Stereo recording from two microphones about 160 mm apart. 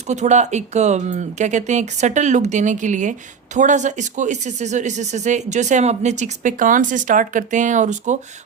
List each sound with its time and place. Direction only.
0.1 s speech: 45° right (ahead or behind)